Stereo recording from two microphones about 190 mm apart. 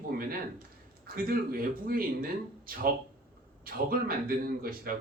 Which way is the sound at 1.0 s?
50° right (ahead or behind).